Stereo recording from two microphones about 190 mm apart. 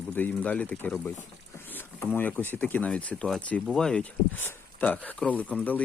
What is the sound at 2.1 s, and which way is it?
Speech, 10° left (ahead or behind).